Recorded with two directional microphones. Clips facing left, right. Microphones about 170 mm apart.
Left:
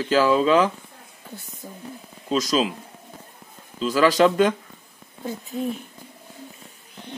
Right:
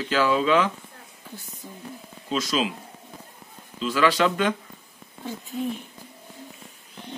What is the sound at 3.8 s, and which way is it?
Speech, 40° left (ahead or behind).